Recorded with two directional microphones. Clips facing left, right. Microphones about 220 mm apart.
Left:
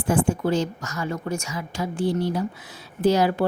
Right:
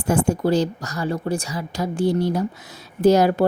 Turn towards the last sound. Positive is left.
turn(degrees=-45)  # may be behind; listen again after turning